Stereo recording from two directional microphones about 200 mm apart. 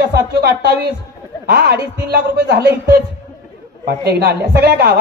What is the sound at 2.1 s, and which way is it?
Speech, 55° right (ahead or behind).